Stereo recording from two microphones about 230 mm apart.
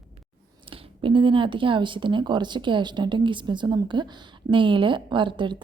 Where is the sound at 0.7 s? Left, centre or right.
Right.